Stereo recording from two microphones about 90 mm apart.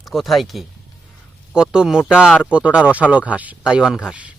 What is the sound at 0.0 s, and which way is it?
A man's voice, centre (ahead or behind).